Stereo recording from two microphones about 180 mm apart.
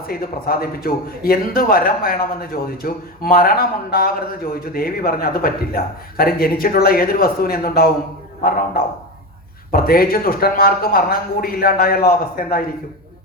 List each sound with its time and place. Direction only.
0.1 s speech: 55° left (ahead or behind)